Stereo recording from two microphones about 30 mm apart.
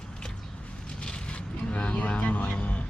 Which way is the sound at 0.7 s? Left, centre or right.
Left.